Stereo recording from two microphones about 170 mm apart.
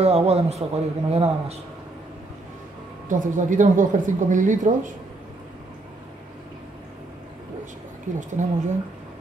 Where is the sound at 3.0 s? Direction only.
50° right (ahead or behind).